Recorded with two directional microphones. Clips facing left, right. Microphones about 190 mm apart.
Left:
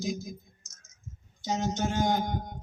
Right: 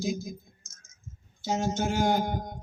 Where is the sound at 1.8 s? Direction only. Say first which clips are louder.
Right 1 dB; 10° right (ahead or behind).